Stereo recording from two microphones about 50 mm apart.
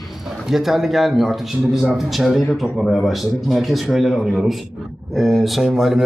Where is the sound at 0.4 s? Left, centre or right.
Centre.